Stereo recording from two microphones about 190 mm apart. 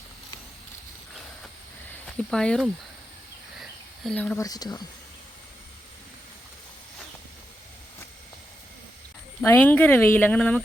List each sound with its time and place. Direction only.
1.9 s a sound: 5° left (ahead or behind)
4.4 s speech: 20° left (ahead or behind)
9.4 s speech: 10° left (ahead or behind)